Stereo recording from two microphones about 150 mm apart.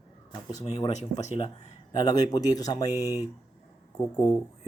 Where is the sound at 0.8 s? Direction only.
45° left (ahead or behind).